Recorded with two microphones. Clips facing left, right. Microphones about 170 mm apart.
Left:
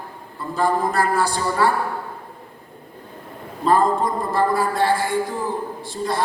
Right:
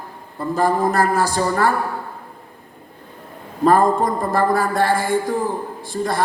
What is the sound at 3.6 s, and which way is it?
A man's voice, 50° right (ahead or behind).